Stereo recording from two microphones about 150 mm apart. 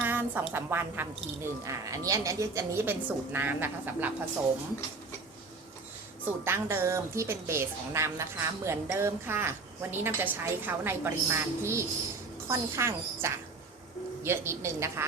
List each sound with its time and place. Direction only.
0.0 s a woman's voice: 15° right (ahead or behind)
6.2 s a woman's voice: 15° right (ahead or behind)